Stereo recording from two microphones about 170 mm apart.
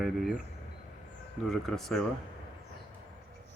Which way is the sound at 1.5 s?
Centre (ahead or behind).